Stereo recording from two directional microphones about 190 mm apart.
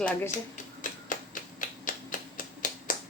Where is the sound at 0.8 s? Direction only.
45° left (ahead or behind).